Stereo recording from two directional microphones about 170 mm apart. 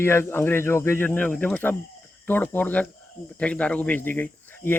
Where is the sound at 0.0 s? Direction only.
15° left (ahead or behind).